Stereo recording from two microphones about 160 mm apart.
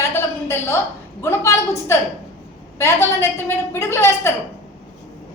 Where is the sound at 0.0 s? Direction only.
15° left (ahead or behind).